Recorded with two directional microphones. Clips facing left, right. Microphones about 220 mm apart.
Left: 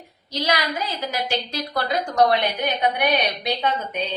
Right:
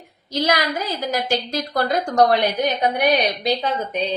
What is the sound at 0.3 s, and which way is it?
A woman's voice, 50° right (ahead or behind).